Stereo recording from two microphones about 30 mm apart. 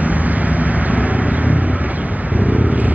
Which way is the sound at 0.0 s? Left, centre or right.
Right.